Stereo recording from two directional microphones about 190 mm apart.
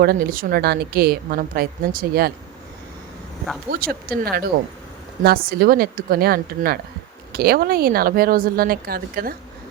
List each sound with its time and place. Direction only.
0.0 s a woman's voice: 50° right (ahead or behind)
3.7 s a woman's voice: 50° right (ahead or behind)